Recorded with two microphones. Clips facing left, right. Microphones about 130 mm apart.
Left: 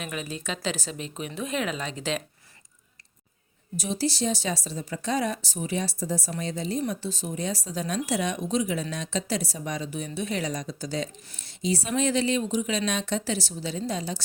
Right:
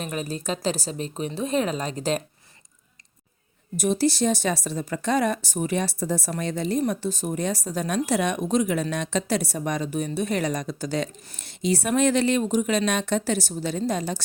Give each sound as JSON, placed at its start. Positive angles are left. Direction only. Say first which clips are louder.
{"t": 0.0, "sound": "a woman's voice", "louder": "right 4 dB", "side_deg": -40}
{"t": 3.8, "sound": "speech", "louder": "right 6 dB", "side_deg": -55}